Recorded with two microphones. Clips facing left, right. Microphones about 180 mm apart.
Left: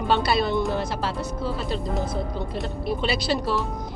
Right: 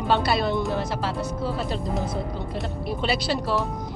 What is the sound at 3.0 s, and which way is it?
Speech, 20° left (ahead or behind).